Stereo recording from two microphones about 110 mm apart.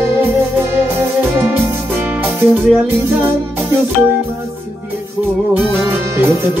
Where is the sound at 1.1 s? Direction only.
20° right (ahead or behind).